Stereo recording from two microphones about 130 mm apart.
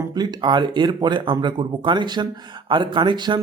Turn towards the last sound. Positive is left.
turn(degrees=-40)  # may be behind; listen again after turning